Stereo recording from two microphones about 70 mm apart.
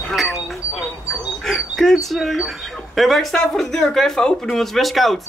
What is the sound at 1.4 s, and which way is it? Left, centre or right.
Speech, centre.